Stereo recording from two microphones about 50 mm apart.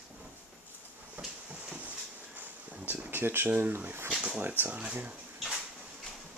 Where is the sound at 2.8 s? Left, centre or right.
Right.